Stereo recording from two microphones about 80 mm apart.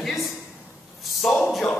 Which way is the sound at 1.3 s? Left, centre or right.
Centre.